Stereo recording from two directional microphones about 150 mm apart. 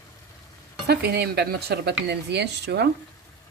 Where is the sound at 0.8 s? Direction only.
90° right.